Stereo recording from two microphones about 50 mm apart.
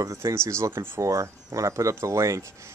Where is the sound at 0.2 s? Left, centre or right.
Right.